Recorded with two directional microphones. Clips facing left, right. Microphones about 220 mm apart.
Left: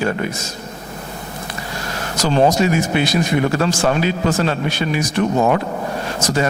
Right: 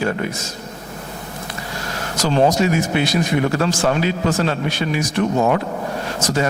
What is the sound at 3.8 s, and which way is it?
Speech, 25° left (ahead or behind).